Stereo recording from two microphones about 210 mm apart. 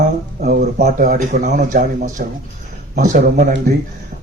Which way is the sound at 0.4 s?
45° right (ahead or behind).